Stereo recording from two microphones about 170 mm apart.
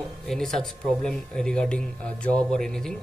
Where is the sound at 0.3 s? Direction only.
5° left (ahead or behind).